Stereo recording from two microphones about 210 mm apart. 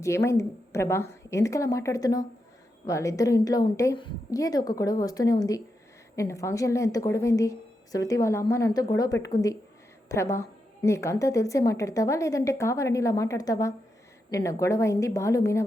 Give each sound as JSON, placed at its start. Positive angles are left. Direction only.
{"t": 0.0, "sound": "a woman's voice", "side_deg": 15}